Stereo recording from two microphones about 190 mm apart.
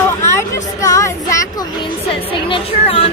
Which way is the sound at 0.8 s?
15° left (ahead or behind).